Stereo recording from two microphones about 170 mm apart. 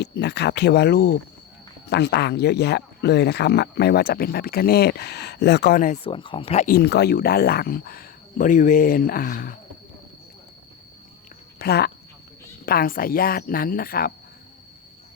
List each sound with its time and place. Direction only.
0.0 s speech: 80° left; by 1.2 s 65° left (ahead or behind)
1.9 s speech: 80° left; by 6.0 s 55° left (ahead or behind)
6.0 s speech: 30° left (ahead or behind)
6.7 s speech: 70° left (ahead or behind)
11.6 s speech: 70° left (ahead or behind)